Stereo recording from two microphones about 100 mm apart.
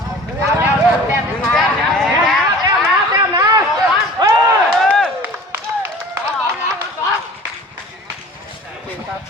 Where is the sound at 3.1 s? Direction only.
35° right (ahead or behind).